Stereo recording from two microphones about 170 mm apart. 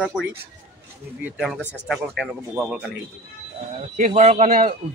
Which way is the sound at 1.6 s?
10° left (ahead or behind).